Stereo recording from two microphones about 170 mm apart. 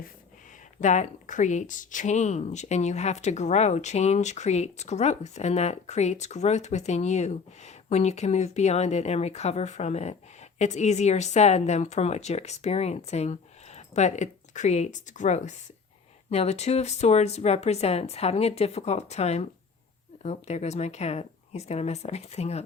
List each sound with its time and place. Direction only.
0.8 s speech: 45° left (ahead or behind)